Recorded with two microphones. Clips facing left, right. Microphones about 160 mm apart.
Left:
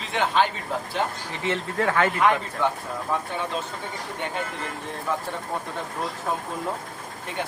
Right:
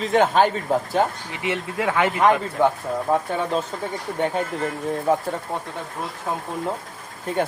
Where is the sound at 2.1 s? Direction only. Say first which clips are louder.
Right 4 dB; 40° right (ahead or behind).